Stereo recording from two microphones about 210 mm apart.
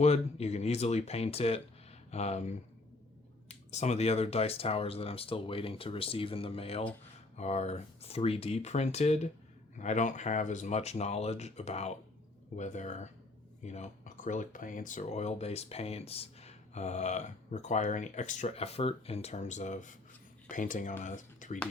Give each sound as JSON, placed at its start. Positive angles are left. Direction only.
{"t": 0.0, "sound": "speech", "side_deg": 30}